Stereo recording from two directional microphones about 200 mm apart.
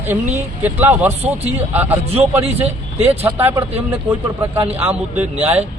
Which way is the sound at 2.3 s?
30° right (ahead or behind).